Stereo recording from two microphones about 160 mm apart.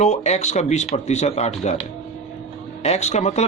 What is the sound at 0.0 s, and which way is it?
Speech, 45° left (ahead or behind).